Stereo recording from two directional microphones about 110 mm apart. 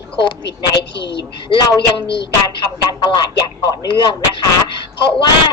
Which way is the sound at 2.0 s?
50° left (ahead or behind).